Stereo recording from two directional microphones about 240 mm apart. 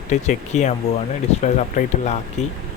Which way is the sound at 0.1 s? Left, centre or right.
Left.